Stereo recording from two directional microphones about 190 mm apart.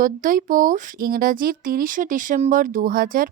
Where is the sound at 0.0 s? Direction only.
45° right (ahead or behind).